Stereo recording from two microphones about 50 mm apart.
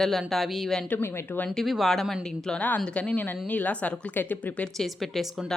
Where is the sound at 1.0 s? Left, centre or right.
Left.